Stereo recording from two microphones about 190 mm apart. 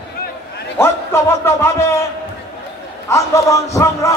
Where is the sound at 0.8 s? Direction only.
15° left (ahead or behind).